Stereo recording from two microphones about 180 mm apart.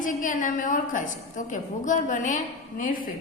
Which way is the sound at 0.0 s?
45° left (ahead or behind).